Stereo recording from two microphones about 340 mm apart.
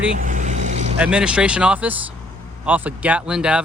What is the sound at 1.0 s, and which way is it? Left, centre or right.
Speech, centre.